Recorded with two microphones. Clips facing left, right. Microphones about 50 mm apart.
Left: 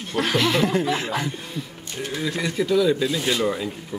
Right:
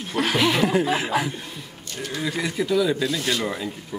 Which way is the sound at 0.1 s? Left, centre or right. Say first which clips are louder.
Even; centre.